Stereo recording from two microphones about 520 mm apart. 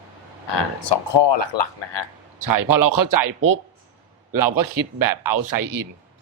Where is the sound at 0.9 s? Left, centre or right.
Left.